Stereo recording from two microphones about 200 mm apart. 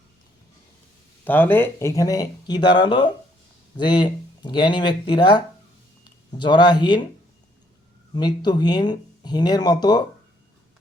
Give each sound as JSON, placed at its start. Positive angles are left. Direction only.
{"t": 1.2, "sound": "speech", "side_deg": 10}
{"t": 8.1, "sound": "speech", "side_deg": 20}